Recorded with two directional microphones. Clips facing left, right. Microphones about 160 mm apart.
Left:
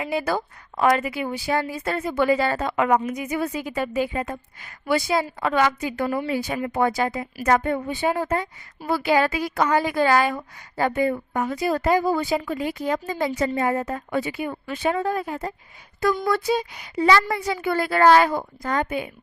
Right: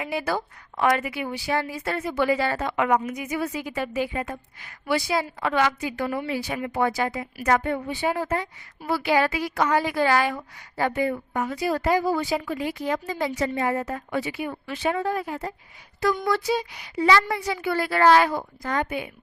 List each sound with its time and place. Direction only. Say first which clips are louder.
0.0 s a woman's voice: left 2 dB; 45° left (ahead or behind)
6.3 s a woman's voice: left 3 dB; 45° left (ahead or behind)